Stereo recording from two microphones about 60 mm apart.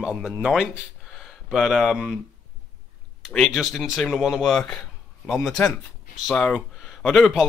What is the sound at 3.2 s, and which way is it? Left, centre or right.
A man's voice, centre.